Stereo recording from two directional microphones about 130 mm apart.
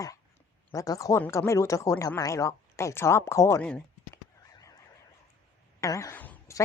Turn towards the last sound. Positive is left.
turn(degrees=15)  # may be behind; listen again after turning